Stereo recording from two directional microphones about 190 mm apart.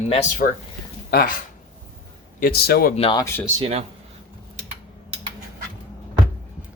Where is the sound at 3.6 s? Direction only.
35° right (ahead or behind).